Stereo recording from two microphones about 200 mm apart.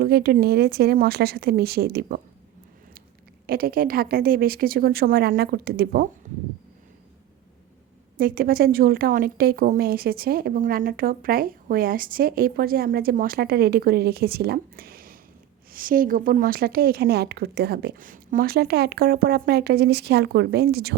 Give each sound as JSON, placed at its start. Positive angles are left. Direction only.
{"t": 0.0, "sound": "a woman's voice", "side_deg": -50}
{"t": 3.4, "sound": "a woman's voice", "side_deg": -50}
{"t": 8.2, "sound": "a woman's voice", "side_deg": -45}